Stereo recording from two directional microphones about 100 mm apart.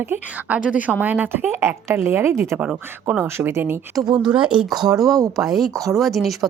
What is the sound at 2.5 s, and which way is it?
Speech, 15° right (ahead or behind).